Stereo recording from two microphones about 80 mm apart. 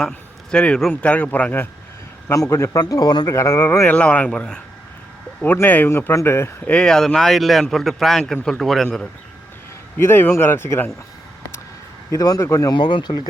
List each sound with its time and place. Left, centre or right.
0.5 s speech: centre
2.3 s a man's voice: left
2.8 s speech: left
3.3 s speech: left
3.8 s speech: centre
5.4 s speech: left
6.7 s speech: centre
10.0 s speech: left
12.1 s a man's voice: left
12.7 s speech: left